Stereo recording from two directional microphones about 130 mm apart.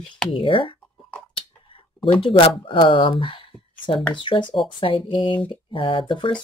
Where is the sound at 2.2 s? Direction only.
40° left (ahead or behind).